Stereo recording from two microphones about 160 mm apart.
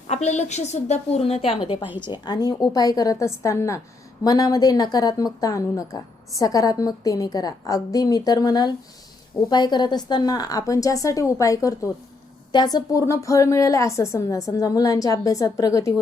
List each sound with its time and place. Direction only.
0.1 s a woman's voice: 45° left (ahead or behind); by 16.0 s 20° left (ahead or behind)